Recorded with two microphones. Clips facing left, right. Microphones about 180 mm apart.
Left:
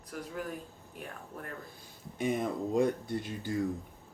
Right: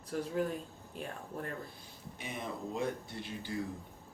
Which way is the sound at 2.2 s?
50° left (ahead or behind).